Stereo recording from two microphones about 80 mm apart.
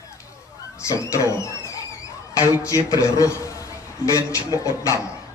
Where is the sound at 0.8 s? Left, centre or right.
Left.